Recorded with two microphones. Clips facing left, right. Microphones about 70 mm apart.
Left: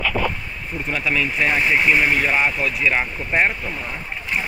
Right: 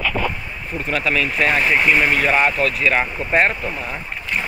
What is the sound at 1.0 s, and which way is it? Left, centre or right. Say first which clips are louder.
Speech: right 1 dB; centre.